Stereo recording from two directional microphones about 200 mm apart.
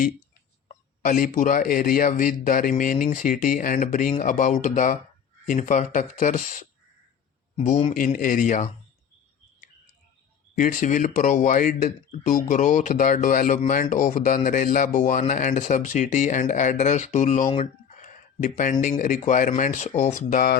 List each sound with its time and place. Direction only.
1.0 s speech: 40° left (ahead or behind)
10.5 s speech: 40° left (ahead or behind)